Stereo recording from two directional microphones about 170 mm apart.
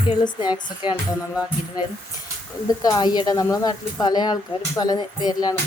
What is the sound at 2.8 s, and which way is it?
Speech, 25° left (ahead or behind).